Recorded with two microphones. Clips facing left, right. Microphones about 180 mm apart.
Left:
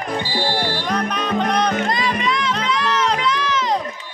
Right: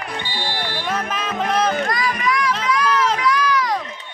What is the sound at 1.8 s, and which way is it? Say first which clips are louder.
Music: left 1 dB; 25° left (ahead or behind).